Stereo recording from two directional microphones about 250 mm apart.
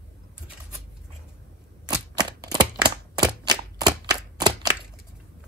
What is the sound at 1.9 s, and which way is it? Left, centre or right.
Typewriter, centre.